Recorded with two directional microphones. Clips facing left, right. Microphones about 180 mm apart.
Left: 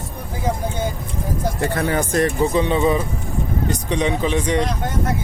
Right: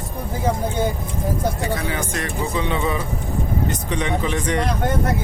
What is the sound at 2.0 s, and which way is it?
Speech, 35° left (ahead or behind).